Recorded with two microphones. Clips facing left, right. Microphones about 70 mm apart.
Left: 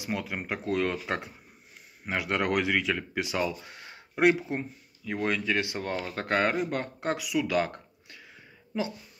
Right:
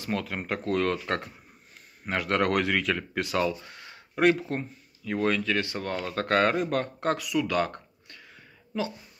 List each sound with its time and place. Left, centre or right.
0.0 s speech: centre
3.6 s speech: left
5.9 s speech: centre
7.2 s speech: centre